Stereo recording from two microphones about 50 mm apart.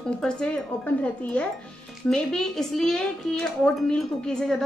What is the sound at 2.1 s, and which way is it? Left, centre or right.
Speech, centre.